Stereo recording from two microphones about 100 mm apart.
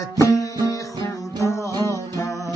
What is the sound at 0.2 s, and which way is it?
Music, 35° left (ahead or behind).